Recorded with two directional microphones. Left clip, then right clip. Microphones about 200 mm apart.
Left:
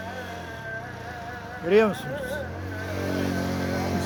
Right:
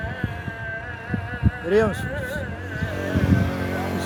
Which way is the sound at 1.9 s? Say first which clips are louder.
Right 2 dB; 40° right (ahead or behind).